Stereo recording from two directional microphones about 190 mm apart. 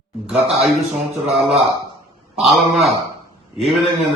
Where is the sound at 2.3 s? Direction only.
Centre (ahead or behind).